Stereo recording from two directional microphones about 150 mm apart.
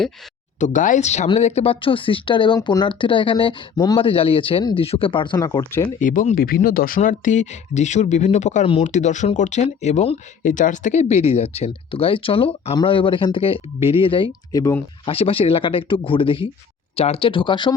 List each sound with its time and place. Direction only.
0.6 s speech: 60° left (ahead or behind); by 5.6 s 25° left (ahead or behind)
6.0 s speech: 60° left (ahead or behind); by 14.3 s 35° left (ahead or behind)
14.5 s speech: 20° left (ahead or behind)
15.0 s speech: 40° left (ahead or behind)